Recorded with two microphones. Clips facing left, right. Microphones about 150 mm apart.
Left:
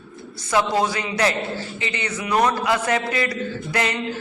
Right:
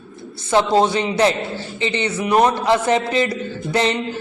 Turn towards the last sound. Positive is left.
turn(degrees=-25)  # may be behind; listen again after turning